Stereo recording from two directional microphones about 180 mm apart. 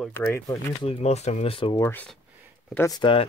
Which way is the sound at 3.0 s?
30° left (ahead or behind).